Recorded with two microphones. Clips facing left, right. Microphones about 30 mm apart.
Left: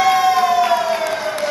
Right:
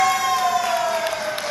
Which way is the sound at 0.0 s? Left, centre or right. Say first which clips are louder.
Left 5 dB; left.